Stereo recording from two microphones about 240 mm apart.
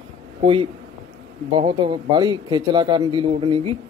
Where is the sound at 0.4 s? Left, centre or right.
Right.